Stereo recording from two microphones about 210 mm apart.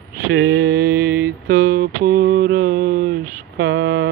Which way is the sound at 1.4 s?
45° right (ahead or behind).